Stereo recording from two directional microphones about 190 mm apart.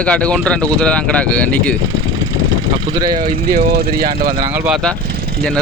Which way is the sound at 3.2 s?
50° right (ahead or behind).